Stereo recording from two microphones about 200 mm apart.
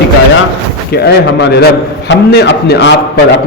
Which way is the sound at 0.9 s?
55° left (ahead or behind).